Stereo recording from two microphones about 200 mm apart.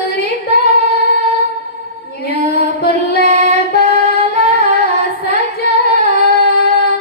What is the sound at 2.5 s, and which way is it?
Music, 50° left (ahead or behind).